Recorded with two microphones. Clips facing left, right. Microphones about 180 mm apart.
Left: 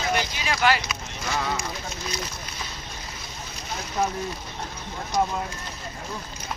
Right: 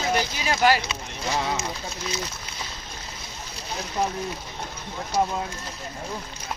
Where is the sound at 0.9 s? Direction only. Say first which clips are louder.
Right 2 dB; 30° right (ahead or behind).